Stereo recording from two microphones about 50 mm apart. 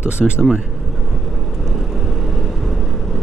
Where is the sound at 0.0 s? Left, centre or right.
Right.